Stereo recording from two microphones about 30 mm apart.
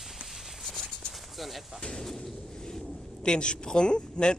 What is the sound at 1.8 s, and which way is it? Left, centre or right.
Speech, centre.